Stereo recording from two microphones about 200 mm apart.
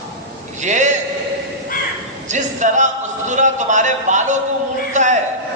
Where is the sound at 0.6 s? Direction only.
35° right (ahead or behind).